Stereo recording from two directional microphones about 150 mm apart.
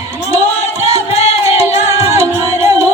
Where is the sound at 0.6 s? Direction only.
45° left (ahead or behind).